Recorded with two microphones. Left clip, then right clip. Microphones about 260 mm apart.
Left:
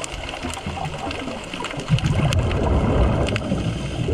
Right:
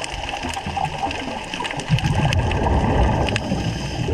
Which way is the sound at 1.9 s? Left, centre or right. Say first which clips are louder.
Right 2 dB; left.